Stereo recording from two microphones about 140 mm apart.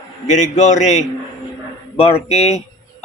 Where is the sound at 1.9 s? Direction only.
45° left (ahead or behind).